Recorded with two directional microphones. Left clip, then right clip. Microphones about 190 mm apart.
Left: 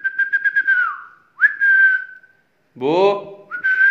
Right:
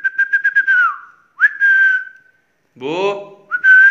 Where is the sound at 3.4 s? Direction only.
10° left (ahead or behind).